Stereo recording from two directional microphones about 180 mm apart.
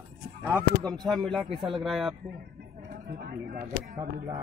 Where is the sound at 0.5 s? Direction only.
15° right (ahead or behind).